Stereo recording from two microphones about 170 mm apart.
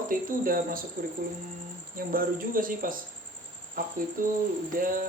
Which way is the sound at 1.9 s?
55° right (ahead or behind).